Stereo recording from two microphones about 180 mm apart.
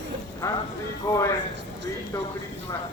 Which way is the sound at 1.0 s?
15° left (ahead or behind).